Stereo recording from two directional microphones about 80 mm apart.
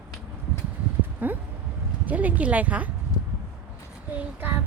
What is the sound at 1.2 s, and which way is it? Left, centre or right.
A woman's voice, right.